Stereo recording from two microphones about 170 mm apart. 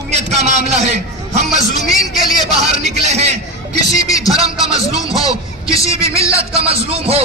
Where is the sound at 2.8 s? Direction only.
40° right (ahead or behind).